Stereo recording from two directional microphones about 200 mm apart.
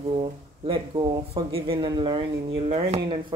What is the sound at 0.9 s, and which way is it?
Speech, 25° right (ahead or behind).